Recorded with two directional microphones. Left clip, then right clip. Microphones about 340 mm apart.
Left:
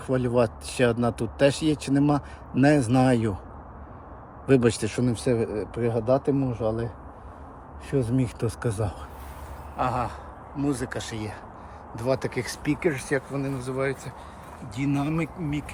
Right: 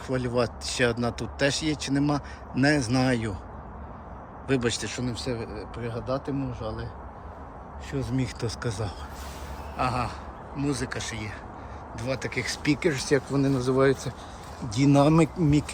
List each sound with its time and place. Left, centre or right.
0.1 s speech: centre
4.4 s speech: centre
7.9 s speech: centre